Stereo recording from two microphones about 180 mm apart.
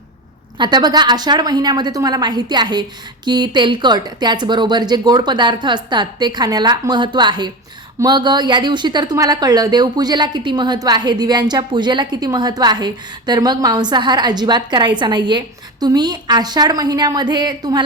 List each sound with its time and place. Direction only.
0.6 s a woman's voice: 25° right (ahead or behind)